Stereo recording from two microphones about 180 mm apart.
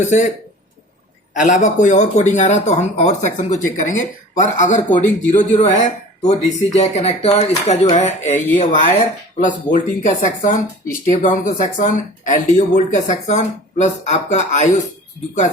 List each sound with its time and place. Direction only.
0.0 s speech: 40° left (ahead or behind)
1.3 s speech: 45° left (ahead or behind)